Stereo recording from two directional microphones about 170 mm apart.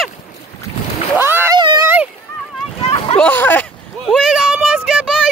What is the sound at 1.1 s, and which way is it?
Splash, 10° right (ahead or behind).